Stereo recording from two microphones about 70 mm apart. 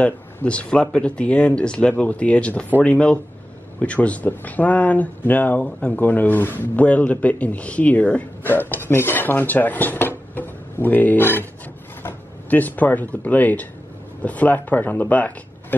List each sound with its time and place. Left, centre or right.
0.0 s a man's voice: centre